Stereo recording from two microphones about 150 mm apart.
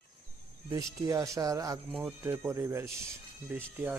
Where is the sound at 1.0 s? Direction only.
20° right (ahead or behind).